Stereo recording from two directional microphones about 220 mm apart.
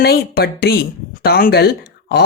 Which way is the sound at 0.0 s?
45° left (ahead or behind).